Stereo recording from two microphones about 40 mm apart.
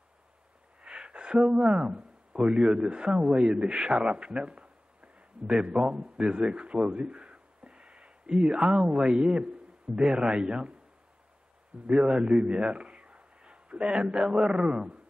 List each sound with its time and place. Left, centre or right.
0.8 s a sound: right
2.3 s a man's voice: right
4.1 s a sound: right
5.8 s a man's voice: right
11.9 s a man's voice: centre
12.2 s a man's voice: right